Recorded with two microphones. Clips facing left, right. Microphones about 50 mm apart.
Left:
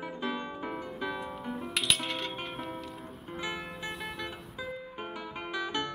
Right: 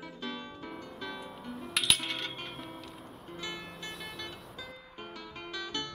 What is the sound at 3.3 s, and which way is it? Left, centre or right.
Music, centre.